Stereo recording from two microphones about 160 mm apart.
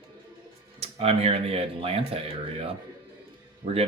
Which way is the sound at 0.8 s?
40° right (ahead or behind).